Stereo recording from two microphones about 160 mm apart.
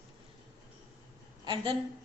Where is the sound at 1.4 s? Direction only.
30° right (ahead or behind).